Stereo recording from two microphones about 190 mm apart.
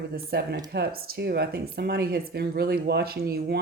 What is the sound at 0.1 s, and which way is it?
Speech, 60° right (ahead or behind).